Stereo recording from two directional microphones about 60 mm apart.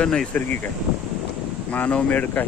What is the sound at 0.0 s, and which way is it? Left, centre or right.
Speech, centre.